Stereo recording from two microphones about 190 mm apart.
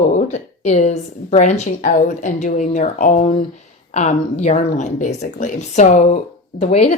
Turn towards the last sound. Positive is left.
turn(degrees=35)  # may be behind; listen again after turning